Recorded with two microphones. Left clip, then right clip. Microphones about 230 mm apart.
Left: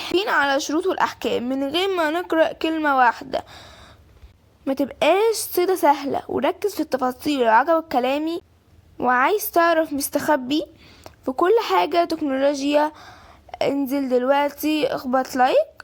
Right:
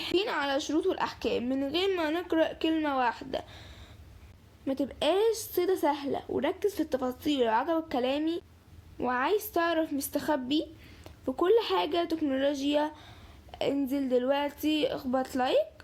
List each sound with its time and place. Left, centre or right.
0.0 s a woman's voice: left